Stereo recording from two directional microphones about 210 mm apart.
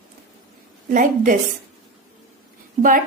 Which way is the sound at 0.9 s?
40° right (ahead or behind).